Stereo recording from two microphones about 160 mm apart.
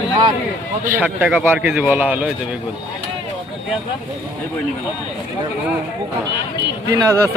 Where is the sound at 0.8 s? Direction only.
15° right (ahead or behind).